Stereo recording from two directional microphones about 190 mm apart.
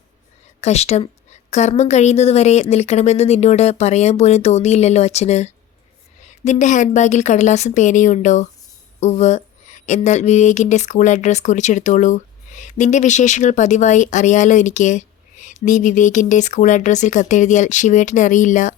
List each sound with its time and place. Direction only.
0.6 s speech: 35° left (ahead or behind)